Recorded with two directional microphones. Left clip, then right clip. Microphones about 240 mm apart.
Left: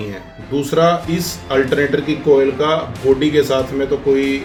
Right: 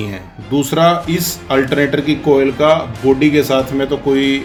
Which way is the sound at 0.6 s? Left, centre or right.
Right.